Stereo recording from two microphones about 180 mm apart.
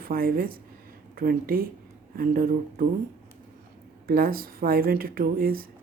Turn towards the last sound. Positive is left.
turn(degrees=-55)  # may be behind; listen again after turning